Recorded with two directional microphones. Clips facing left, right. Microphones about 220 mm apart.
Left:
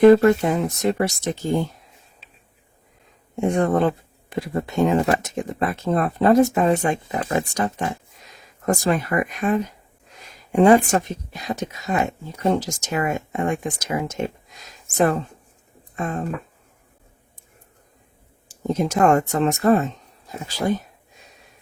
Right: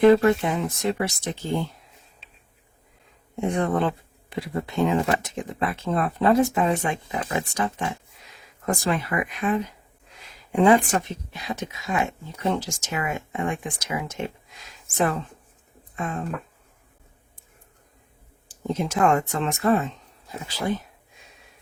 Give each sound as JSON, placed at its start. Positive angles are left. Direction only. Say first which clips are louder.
{"t": 0.0, "sound": "a woman's voice", "louder": "left 4 dB", "side_deg": 40}
{"t": 3.5, "sound": "a woman's voice", "louder": "left 4 dB", "side_deg": 45}
{"t": 18.7, "sound": "a woman's voice", "louder": "left 4 dB", "side_deg": 40}